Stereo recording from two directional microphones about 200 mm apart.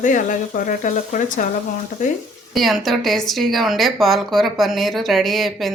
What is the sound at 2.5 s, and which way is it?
Speech, centre (ahead or behind).